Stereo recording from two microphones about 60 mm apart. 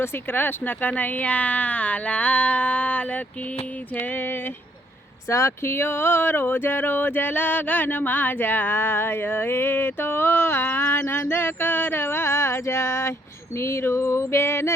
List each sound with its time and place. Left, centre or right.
0.0 s speech: left
5.3 s speech: left
13.6 s a sound: left